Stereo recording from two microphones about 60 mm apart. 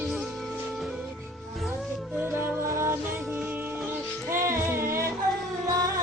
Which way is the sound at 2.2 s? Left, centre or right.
Right.